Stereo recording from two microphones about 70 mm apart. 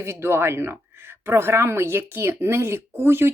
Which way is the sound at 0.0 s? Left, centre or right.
Right.